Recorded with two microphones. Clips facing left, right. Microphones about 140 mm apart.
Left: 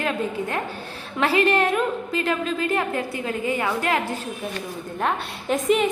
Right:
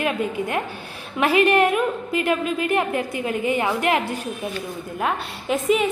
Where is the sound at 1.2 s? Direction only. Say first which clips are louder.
Right 3 dB; 15° right (ahead or behind).